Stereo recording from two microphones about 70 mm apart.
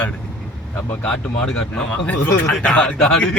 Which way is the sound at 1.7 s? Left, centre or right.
Centre.